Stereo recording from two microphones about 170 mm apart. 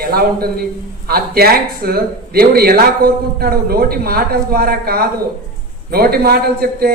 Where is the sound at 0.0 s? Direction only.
60° right (ahead or behind).